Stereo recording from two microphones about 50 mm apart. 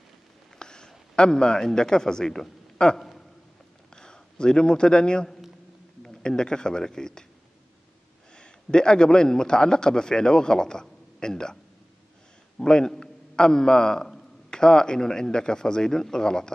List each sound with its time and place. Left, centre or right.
0.6 s a man's voice: centre
3.0 s a sound: centre
3.9 s a man's voice: centre
8.4 s a man's voice: centre
12.5 s a man's voice: centre